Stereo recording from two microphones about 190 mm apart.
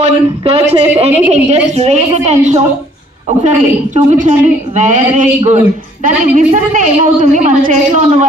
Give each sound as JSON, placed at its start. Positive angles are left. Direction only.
{"t": 0.0, "sound": "a woman's voice", "side_deg": -35}